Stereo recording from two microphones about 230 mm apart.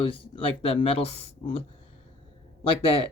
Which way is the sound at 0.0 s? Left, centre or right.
Left.